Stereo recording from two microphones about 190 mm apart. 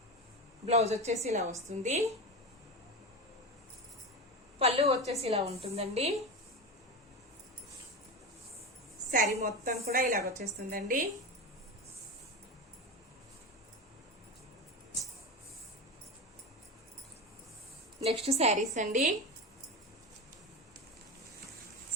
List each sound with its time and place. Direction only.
0.7 s a woman's voice: 35° right (ahead or behind)
4.6 s a woman's voice: 35° right (ahead or behind)
9.0 s a woman's voice: 40° right (ahead or behind)
18.0 s a woman's voice: 35° right (ahead or behind)